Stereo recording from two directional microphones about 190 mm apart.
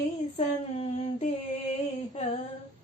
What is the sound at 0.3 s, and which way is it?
Female singing, 35° left (ahead or behind).